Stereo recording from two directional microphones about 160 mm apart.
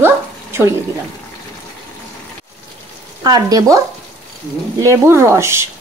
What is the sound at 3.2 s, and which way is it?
Speech, 25° right (ahead or behind).